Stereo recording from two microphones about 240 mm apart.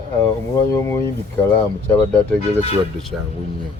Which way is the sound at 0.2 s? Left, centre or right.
Centre.